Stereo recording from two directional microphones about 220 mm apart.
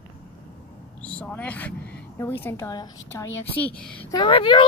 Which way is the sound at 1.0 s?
5° left (ahead or behind).